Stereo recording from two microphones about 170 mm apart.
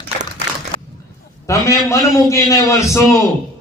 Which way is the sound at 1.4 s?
15° left (ahead or behind).